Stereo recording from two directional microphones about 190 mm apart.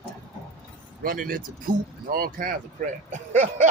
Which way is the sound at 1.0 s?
50° right (ahead or behind).